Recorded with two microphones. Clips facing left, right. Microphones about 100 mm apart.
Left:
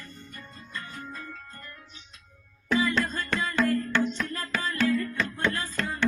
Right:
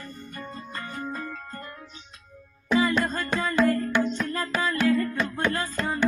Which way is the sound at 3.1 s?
50° right (ahead or behind).